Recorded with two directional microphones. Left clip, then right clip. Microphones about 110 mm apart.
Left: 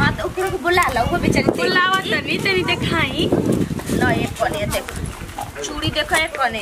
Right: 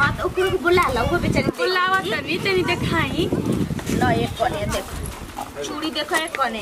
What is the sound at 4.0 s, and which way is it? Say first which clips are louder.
Speech: left 1 dB; 10° left (ahead or behind).